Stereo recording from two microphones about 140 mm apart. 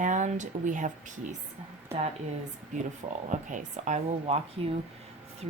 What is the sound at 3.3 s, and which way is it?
Speech, 60° right (ahead or behind).